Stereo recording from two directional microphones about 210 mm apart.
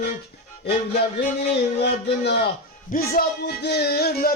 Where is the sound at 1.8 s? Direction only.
50° left (ahead or behind).